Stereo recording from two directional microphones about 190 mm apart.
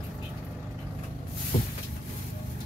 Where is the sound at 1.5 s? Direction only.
35° left (ahead or behind).